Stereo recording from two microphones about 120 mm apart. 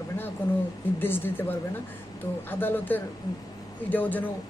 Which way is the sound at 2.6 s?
15° left (ahead or behind).